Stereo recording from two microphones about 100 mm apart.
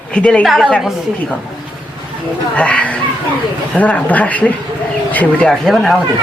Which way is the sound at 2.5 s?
15° left (ahead or behind).